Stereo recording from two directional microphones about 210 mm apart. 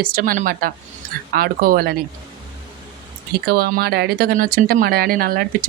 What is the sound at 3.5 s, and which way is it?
Speech, 50° right (ahead or behind).